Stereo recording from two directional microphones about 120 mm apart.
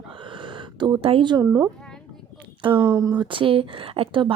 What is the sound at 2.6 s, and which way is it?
Speech, 45° right (ahead or behind).